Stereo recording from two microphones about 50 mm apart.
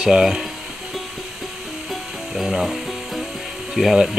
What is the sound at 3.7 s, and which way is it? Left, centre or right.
Speech, centre.